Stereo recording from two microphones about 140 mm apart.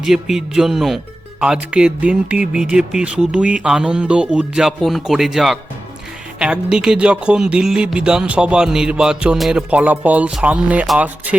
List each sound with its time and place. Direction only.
0.0 s speech: 5° right (ahead or behind)